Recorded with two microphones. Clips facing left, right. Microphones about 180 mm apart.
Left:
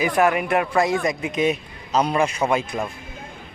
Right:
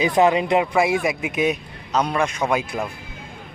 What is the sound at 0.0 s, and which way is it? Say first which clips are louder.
Speech: right 2 dB; 20° right (ahead or behind).